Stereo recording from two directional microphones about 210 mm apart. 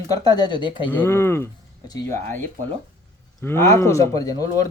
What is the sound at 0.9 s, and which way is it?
Speech, 10° left (ahead or behind).